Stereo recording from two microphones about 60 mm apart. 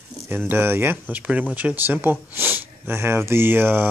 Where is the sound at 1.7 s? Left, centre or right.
Right.